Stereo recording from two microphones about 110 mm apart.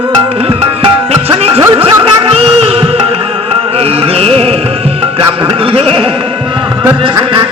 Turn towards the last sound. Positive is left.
turn(degrees=-55)  # may be behind; listen again after turning